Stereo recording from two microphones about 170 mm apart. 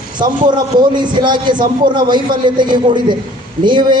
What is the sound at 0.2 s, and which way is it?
A man's voice, 25° right (ahead or behind).